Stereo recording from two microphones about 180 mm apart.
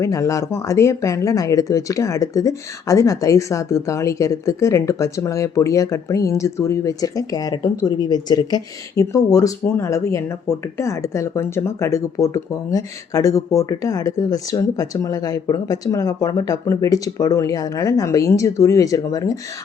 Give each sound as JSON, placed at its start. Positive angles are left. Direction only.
{"t": 0.0, "sound": "speech", "side_deg": 15}